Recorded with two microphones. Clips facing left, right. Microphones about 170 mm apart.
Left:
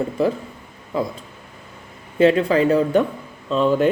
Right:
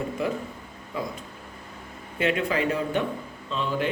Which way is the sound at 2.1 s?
35° left (ahead or behind).